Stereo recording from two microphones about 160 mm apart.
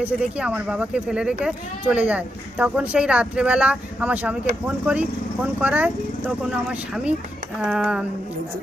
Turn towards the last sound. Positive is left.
turn(degrees=-5)  # may be behind; listen again after turning